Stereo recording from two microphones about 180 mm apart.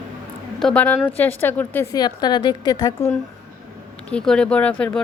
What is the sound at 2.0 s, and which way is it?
A woman's voice, 25° left (ahead or behind).